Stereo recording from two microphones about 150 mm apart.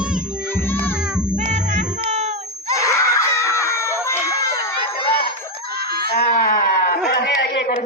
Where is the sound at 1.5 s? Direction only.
50° right (ahead or behind).